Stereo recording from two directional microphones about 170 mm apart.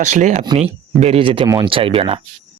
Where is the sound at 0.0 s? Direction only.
45° right (ahead or behind).